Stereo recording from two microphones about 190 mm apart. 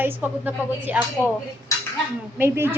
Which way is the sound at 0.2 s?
10° right (ahead or behind).